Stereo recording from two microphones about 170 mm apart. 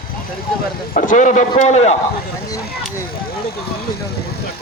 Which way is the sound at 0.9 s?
50° left (ahead or behind).